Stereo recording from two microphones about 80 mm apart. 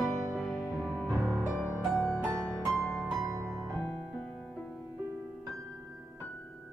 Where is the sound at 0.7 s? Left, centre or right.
Right.